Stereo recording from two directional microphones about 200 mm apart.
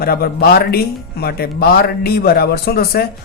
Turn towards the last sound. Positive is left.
turn(degrees=50)  # may be behind; listen again after turning